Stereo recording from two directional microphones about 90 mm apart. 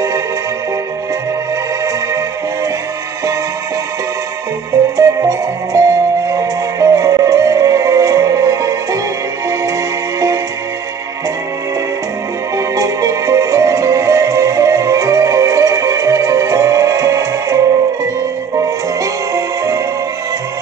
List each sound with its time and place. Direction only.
4.9 s music: 40° right (ahead or behind)
12.5 s music: 40° right (ahead or behind)
19.3 s music: 40° right (ahead or behind)